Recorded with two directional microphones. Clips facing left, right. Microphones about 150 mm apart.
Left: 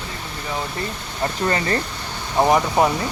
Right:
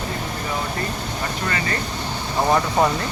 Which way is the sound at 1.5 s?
35° left (ahead or behind).